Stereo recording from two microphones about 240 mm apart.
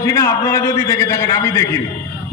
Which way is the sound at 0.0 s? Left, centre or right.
Centre.